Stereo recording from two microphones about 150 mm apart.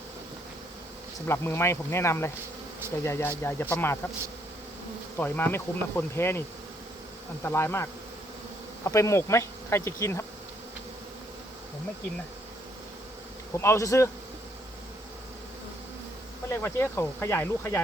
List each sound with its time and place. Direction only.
1.3 s speech: 15° left (ahead or behind)
5.1 s speech: 15° left (ahead or behind)
7.4 s speech: 15° left (ahead or behind)
13.6 s speech: 20° left (ahead or behind)
16.5 s speech: 15° left (ahead or behind)